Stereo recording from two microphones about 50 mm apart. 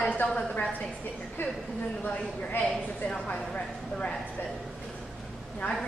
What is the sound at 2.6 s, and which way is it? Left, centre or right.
A woman's voice, centre.